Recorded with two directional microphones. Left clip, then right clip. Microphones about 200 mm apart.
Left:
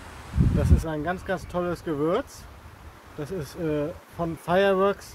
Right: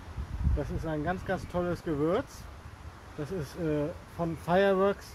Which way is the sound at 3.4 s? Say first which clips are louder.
Left 4 dB; 15° left (ahead or behind).